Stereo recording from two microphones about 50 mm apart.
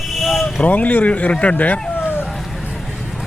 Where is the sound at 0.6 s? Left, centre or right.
Left.